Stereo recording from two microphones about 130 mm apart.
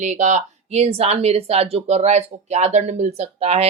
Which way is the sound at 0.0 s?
65° right (ahead or behind).